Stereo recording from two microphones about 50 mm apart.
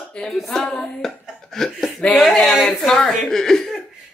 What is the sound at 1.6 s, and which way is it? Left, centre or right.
Chuckle, centre.